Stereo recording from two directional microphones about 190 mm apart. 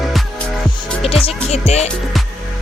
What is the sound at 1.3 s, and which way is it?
Music, 30° left (ahead or behind).